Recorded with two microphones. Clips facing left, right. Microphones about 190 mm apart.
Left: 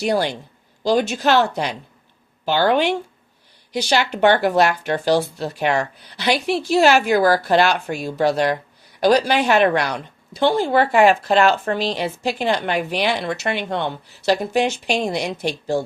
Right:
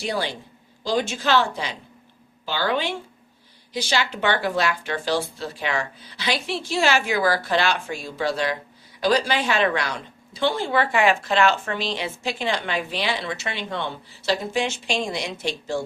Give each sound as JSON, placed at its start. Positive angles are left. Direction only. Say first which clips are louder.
{"t": 0.9, "sound": "a woman's voice", "louder": "left 5 dB", "side_deg": 65}
{"t": 7.1, "sound": "a woman's voice", "louder": "left 6 dB", "side_deg": 40}
{"t": 7.7, "sound": "speech", "louder": "left 4 dB", "side_deg": 65}
{"t": 10.4, "sound": "speech", "louder": "left 5 dB", "side_deg": 40}
{"t": 11.7, "sound": "a woman's voice", "louder": "left 5 dB", "side_deg": 40}
{"t": 12.0, "sound": "speech", "louder": "left 5 dB", "side_deg": 55}